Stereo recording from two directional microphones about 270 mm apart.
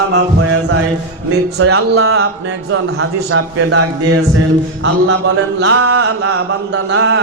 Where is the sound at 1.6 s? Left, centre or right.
Right.